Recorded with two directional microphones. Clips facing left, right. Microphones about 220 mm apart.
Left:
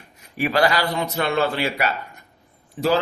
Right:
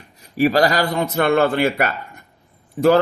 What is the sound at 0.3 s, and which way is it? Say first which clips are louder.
Speech: right 4 dB; 40° right (ahead or behind).